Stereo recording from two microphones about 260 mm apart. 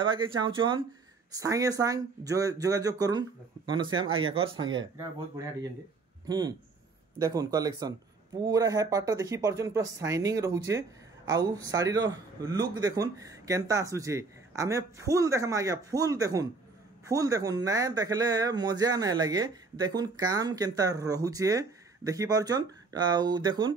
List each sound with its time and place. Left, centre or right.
0.0 s speech: centre